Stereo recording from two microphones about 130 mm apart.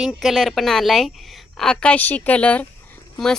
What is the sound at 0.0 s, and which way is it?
A woman's voice, 5° right (ahead or behind).